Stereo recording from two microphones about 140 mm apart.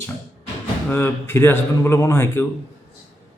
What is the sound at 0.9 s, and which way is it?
A man's voice, 15° left (ahead or behind).